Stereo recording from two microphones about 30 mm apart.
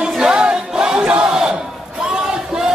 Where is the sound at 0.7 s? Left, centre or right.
Right.